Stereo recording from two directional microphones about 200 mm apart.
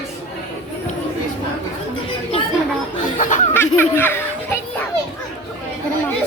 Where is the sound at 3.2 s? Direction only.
40° left (ahead or behind).